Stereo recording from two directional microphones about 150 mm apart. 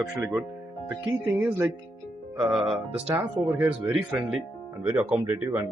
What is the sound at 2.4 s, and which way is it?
Speech, centre (ahead or behind).